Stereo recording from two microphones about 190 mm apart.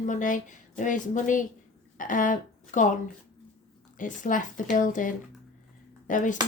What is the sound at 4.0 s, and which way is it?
A woman's voice, 45° left (ahead or behind).